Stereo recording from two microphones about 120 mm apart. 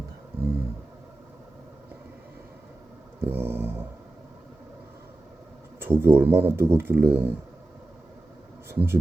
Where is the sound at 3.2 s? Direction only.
20° right (ahead or behind).